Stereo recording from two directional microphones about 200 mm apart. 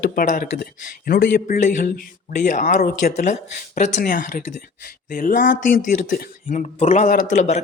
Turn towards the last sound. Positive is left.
turn(degrees=40)  # may be behind; listen again after turning